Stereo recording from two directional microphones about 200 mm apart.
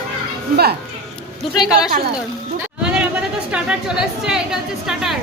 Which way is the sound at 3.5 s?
5° right (ahead or behind).